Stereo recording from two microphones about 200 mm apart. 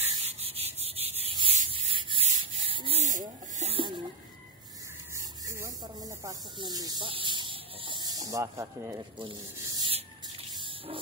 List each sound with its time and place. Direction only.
0.0 s rub: 30° right (ahead or behind)
5.1 s squeal: 15° right (ahead or behind)